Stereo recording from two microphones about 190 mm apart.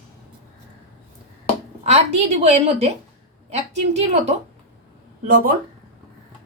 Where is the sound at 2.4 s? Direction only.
35° right (ahead or behind).